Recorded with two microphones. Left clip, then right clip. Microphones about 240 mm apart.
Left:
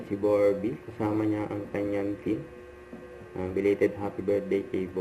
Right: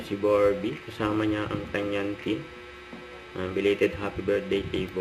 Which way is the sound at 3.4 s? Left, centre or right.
Right.